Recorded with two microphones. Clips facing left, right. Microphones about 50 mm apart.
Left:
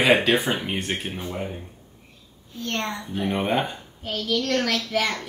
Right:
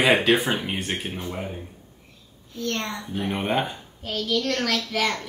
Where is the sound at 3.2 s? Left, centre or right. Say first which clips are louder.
Left 1 dB; centre.